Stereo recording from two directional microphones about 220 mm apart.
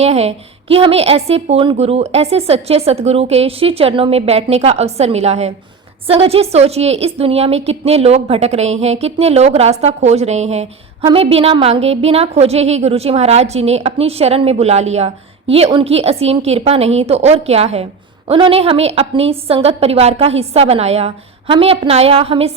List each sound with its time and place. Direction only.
0.0 s a woman's voice: 30° right (ahead or behind)